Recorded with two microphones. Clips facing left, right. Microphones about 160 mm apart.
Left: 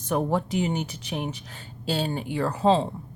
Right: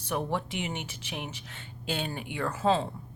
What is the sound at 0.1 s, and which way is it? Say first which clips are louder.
Speech: left 6 dB; 40° left (ahead or behind).